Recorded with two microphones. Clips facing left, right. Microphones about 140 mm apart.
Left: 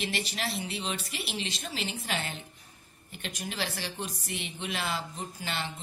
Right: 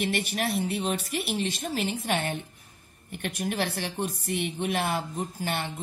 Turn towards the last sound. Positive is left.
turn(degrees=-55)  # may be behind; listen again after turning